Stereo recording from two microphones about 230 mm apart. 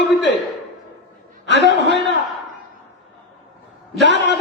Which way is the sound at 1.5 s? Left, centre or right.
Left.